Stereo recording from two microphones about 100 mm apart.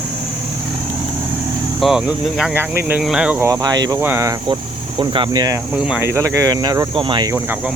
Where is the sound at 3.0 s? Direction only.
10° right (ahead or behind).